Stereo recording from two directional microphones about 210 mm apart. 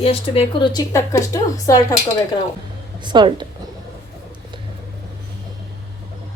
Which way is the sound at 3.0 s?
20° right (ahead or behind).